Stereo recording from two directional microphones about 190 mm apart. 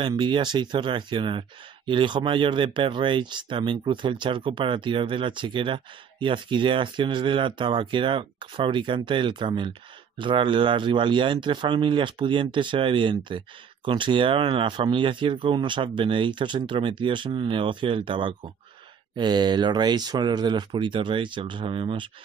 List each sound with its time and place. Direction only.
0.0 s speech: 25° right (ahead or behind)